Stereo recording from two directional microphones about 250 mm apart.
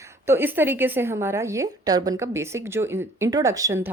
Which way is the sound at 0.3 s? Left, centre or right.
Centre.